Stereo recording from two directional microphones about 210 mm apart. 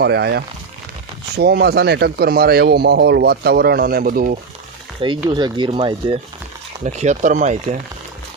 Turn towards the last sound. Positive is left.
turn(degrees=-35)  # may be behind; listen again after turning